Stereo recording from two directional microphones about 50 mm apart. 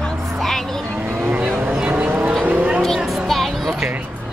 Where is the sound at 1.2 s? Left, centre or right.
Right.